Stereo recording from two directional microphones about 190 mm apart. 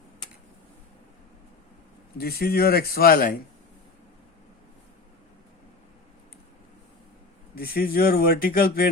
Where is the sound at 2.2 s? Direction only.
55° left (ahead or behind).